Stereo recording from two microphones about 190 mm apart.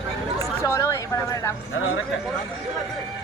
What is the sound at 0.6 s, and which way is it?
Speech, 15° left (ahead or behind).